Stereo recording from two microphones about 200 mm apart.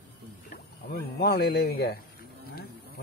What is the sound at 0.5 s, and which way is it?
Speech, 50° left (ahead or behind).